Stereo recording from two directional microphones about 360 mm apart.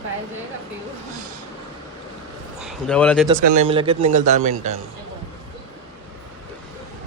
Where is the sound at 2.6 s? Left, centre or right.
Centre.